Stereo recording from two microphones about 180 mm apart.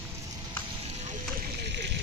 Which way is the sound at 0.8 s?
40° right (ahead or behind).